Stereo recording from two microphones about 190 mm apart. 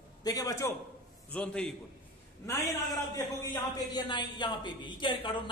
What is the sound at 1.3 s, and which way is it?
Speech, 5° left (ahead or behind).